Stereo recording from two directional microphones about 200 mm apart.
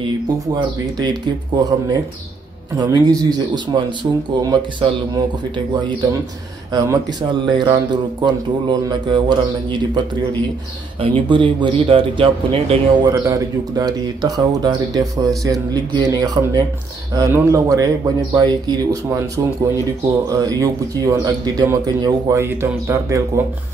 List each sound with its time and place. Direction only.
0.9 s speech: 20° right (ahead or behind)
6.7 s speech: 20° right (ahead or behind)